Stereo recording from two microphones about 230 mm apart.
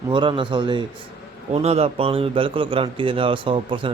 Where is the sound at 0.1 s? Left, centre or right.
Right.